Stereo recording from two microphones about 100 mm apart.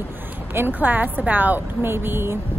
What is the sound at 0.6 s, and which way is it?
A woman's voice, 20° right (ahead or behind).